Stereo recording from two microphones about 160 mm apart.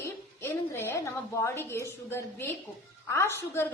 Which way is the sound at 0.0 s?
15° left (ahead or behind).